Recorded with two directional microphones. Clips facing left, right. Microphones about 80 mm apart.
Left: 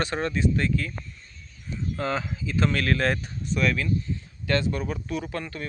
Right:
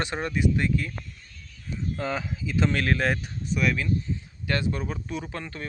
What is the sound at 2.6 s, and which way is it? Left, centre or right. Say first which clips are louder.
Speech: even; right.